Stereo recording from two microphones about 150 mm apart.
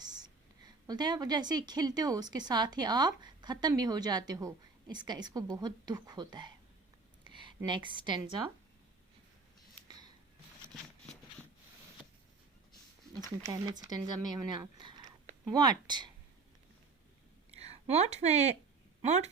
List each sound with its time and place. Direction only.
0.9 s a woman's voice: 30° right (ahead or behind)
13.5 s a woman's voice: 25° right (ahead or behind)
17.5 s a woman's voice: 45° right (ahead or behind)